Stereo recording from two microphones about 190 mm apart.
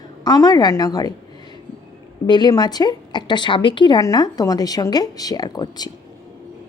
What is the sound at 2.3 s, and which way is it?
A woman's voice, 20° left (ahead or behind).